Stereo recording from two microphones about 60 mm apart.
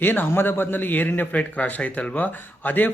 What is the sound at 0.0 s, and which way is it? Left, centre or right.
A man's voice, left.